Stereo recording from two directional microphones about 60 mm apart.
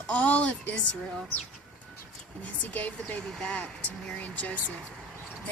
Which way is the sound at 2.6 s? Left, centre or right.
Left.